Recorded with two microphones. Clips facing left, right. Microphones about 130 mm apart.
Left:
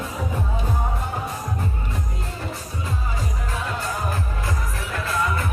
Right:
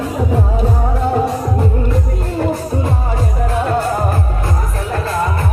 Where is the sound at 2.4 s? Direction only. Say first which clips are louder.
Right 17 dB; 65° right (ahead or behind).